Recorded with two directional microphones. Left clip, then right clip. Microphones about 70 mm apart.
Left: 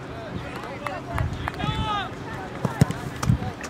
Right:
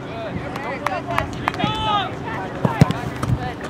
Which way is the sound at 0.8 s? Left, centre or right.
Right.